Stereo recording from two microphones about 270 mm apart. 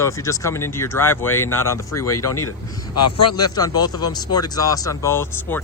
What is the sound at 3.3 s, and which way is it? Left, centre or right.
Speech, centre.